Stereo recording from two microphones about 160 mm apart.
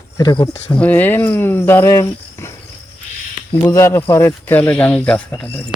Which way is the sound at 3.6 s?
15° left (ahead or behind).